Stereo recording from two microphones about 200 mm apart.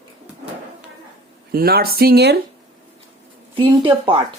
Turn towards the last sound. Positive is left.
turn(degrees=-25)  # may be behind; listen again after turning